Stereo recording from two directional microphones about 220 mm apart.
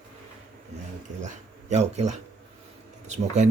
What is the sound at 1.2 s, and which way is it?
A man's voice, 30° right (ahead or behind).